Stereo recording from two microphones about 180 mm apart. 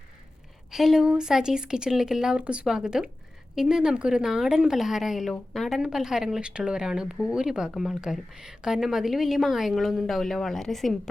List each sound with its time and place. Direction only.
0.7 s a woman's voice: centre (ahead or behind)